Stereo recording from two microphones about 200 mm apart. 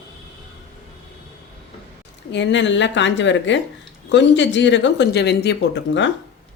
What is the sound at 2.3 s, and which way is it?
Speech, 60° left (ahead or behind).